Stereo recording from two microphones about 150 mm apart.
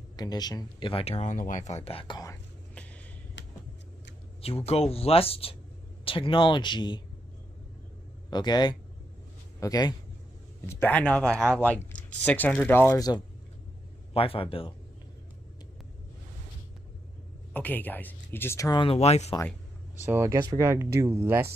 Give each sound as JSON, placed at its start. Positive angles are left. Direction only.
{"t": 0.1, "sound": "speech", "side_deg": 25}
{"t": 1.9, "sound": "speech", "side_deg": 40}
{"t": 4.4, "sound": "speech", "side_deg": 40}
{"t": 8.3, "sound": "a man's voice", "side_deg": 30}
{"t": 10.7, "sound": "speech", "side_deg": 10}
{"t": 14.1, "sound": "speech", "side_deg": 40}
{"t": 17.5, "sound": "speech", "side_deg": 10}
{"t": 18.8, "sound": "speech", "side_deg": 40}
{"t": 20.0, "sound": "speech", "side_deg": -15}